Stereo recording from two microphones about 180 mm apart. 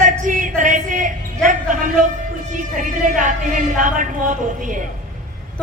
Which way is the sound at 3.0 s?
45° right (ahead or behind).